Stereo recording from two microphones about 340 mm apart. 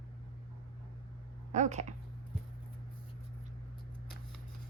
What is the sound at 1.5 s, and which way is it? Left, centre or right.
Speech, right.